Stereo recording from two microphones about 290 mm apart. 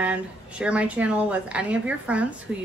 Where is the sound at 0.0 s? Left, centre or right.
Centre.